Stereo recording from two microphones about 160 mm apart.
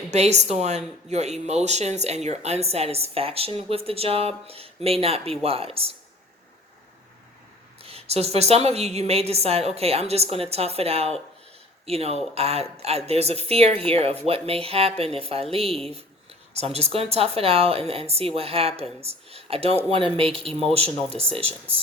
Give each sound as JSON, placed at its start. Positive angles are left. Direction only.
{"t": 0.1, "sound": "speech", "side_deg": -45}
{"t": 7.8, "sound": "speech", "side_deg": -40}